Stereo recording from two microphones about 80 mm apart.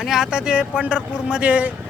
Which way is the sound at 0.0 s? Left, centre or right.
Centre.